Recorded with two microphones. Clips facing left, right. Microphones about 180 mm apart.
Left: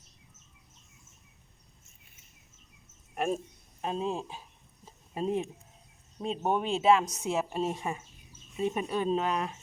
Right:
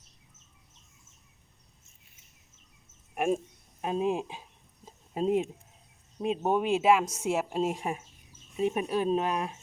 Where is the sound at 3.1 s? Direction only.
15° right (ahead or behind).